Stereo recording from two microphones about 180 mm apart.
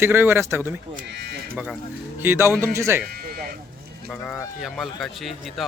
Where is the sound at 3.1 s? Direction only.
55° right (ahead or behind).